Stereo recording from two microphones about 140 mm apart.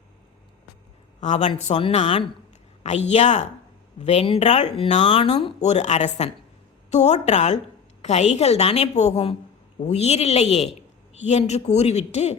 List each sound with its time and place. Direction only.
1.2 s a woman's voice: 55° left (ahead or behind)
5.6 s a woman's voice: 55° left (ahead or behind)